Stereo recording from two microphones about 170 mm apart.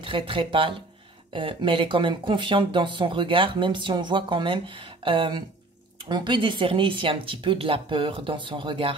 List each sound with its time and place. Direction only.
0.0 s speech: 30° right (ahead or behind)